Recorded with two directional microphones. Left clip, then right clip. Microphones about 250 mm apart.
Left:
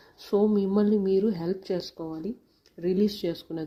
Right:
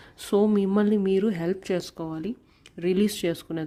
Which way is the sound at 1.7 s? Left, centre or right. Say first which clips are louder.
Right 2 dB; right.